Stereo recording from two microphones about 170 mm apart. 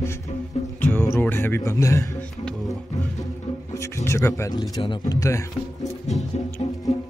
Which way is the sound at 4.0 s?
15° left (ahead or behind).